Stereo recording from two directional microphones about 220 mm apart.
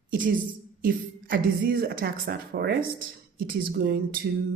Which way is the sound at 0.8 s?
40° right (ahead or behind).